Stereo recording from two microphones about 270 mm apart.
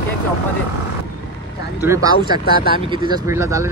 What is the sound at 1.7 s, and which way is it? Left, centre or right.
Speech, centre.